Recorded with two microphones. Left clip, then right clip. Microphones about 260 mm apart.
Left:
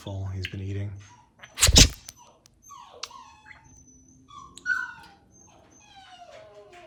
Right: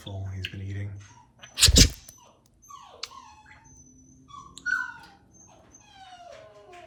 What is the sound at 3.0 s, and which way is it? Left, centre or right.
Dog, centre.